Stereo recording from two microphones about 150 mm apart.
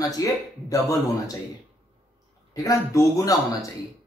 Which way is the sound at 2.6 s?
20° left (ahead or behind).